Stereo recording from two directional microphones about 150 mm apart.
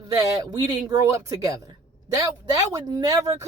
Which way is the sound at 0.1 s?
25° right (ahead or behind).